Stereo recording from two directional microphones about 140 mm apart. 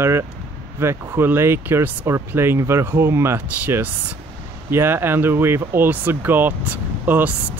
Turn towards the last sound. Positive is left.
turn(degrees=-15)  # may be behind; listen again after turning